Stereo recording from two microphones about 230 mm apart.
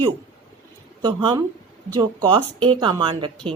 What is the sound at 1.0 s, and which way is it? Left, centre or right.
Speech, centre.